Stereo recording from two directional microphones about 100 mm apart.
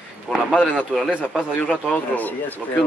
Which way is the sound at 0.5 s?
10° left (ahead or behind).